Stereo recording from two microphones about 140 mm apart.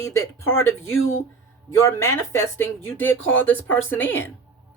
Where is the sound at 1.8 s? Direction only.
20° left (ahead or behind).